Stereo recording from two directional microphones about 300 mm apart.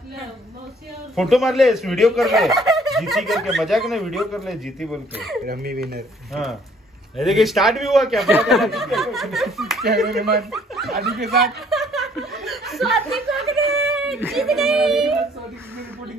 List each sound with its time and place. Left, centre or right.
1.1 s speech: centre
5.4 s speech: right
7.2 s speech: centre
10.0 s speech: right
10.5 s snicker: centre
12.4 s chuckle: centre